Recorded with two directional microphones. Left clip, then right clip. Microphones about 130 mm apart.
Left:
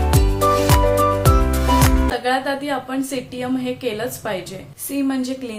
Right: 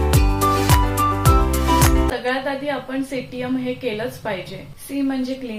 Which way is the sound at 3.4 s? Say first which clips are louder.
Left 1 dB; 25° left (ahead or behind).